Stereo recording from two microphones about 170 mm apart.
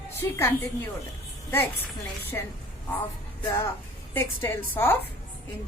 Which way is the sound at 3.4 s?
20° left (ahead or behind).